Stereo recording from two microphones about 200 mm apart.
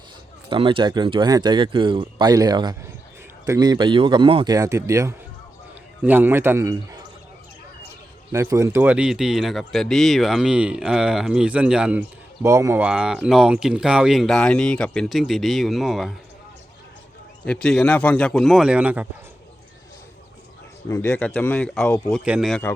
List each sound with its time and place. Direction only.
0.5 s a man's voice: 25° right (ahead or behind)
8.3 s speech: 15° right (ahead or behind)
17.4 s speech: 5° left (ahead or behind)
20.9 s a man's voice: 15° left (ahead or behind)